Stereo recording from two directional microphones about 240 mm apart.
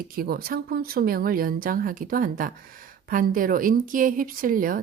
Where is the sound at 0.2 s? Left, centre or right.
Right.